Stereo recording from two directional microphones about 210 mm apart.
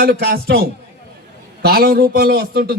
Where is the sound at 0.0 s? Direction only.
50° right (ahead or behind).